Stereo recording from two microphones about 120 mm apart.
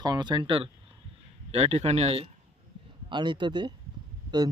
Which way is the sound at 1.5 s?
55° right (ahead or behind).